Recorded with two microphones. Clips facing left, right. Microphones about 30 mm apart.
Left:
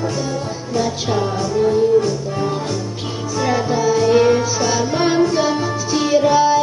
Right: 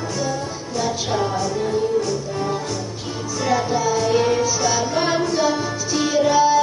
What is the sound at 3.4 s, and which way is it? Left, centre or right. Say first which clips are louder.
Music: left 2 dB; centre.